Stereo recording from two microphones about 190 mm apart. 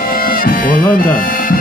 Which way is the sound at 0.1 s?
50° left (ahead or behind).